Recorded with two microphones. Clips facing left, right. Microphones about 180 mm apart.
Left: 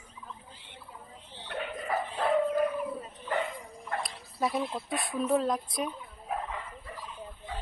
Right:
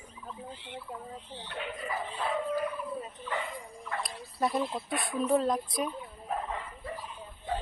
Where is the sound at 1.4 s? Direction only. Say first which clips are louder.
Left 4 dB; 60° left (ahead or behind).